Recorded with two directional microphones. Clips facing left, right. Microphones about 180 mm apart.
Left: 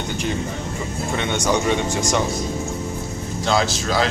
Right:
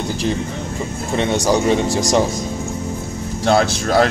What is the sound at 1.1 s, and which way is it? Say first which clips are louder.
Speech: right 5 dB; 35° right (ahead or behind).